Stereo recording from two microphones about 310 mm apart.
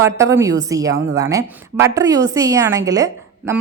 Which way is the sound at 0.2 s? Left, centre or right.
Centre.